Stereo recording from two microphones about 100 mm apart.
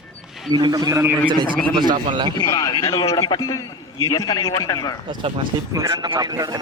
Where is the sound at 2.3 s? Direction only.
40° left (ahead or behind).